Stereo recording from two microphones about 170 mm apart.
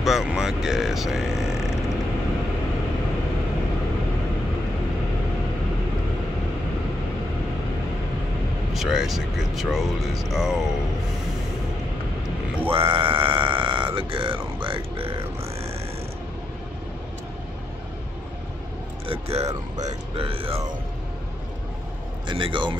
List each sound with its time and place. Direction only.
0.0 s speech: centre (ahead or behind)
8.7 s speech: centre (ahead or behind)
12.7 s speech: 30° right (ahead or behind)
19.0 s speech: 35° right (ahead or behind)
22.3 s speech: 30° right (ahead or behind)